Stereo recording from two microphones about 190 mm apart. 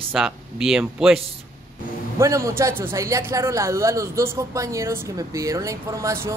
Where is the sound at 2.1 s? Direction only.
15° right (ahead or behind).